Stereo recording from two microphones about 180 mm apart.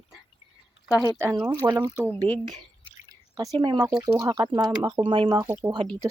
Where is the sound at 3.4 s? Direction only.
30° right (ahead or behind).